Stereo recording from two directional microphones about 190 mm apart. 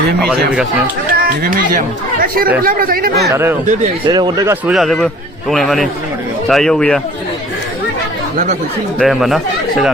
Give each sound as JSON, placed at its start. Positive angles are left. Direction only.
{"t": 1.2, "sound": "speech", "side_deg": -45}
{"t": 3.2, "sound": "speech", "side_deg": -15}
{"t": 4.6, "sound": "speech", "side_deg": 0}
{"t": 9.0, "sound": "speech", "side_deg": 0}